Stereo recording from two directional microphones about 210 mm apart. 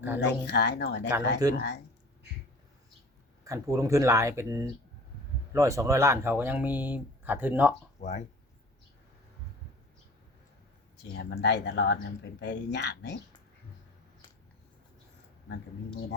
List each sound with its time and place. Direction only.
0.2 s speech: 55° left (ahead or behind)
1.4 s speech: 15° right (ahead or behind)
3.4 s speech: 15° right (ahead or behind)
8.0 s speech: 30° left (ahead or behind)
11.1 s speech: 50° left (ahead or behind)